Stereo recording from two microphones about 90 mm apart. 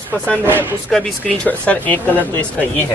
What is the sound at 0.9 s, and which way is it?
Speech, 5° left (ahead or behind).